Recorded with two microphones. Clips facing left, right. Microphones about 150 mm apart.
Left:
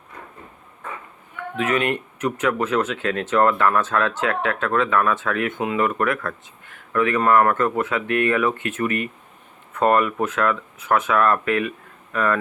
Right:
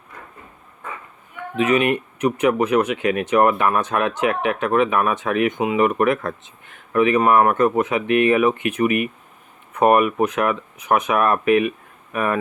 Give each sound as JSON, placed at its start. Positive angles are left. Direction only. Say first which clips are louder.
{"t": 1.5, "sound": "speech", "louder": "right 4 dB", "side_deg": -20}